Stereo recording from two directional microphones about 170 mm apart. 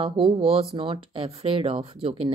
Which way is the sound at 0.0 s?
35° right (ahead or behind).